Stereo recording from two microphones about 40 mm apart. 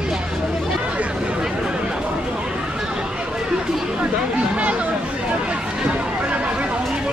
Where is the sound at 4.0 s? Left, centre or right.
Right.